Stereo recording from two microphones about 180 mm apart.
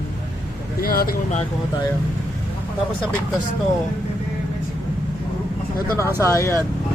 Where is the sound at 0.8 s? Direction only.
55° left (ahead or behind).